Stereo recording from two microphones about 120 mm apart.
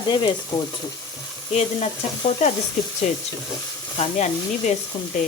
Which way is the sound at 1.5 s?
70° left (ahead or behind).